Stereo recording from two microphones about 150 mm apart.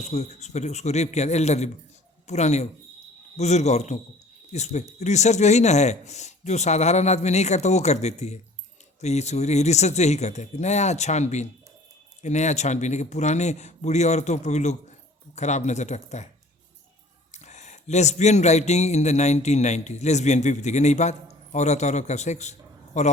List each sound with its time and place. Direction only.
0.0 s speech: 45° left (ahead or behind)
17.3 s speech: 50° left (ahead or behind)